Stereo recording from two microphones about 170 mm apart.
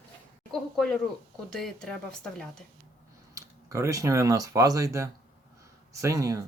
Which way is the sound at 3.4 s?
20° right (ahead or behind).